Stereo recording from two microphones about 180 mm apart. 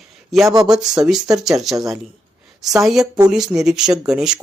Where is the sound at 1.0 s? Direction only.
Centre (ahead or behind).